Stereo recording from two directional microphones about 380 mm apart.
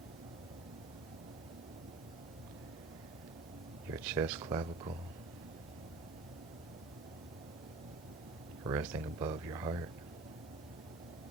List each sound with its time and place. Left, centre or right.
3.9 s speech: centre
8.6 s speech: centre